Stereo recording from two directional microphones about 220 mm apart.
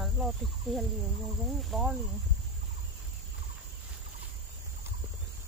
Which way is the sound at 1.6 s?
Centre (ahead or behind).